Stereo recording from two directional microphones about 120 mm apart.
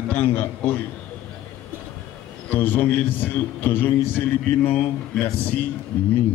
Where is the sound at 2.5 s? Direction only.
15° left (ahead or behind).